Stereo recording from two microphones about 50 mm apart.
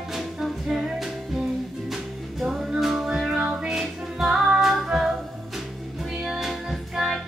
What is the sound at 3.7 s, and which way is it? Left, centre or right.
Music, centre.